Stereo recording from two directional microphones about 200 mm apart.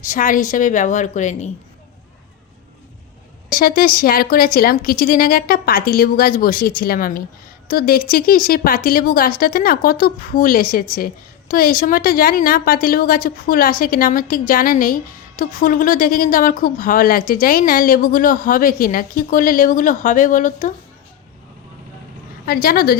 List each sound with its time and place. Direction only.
0.0 s a woman's voice: 40° left (ahead or behind)
3.5 s a woman's voice: 45° left (ahead or behind)
22.4 s a woman's voice: 50° left (ahead or behind)